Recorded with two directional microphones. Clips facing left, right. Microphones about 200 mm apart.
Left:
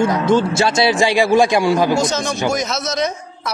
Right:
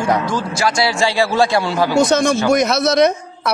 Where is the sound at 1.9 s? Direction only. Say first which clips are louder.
Right 5 dB; 60° right (ahead or behind).